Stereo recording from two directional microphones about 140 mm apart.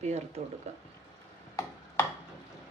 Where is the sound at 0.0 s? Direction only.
50° right (ahead or behind).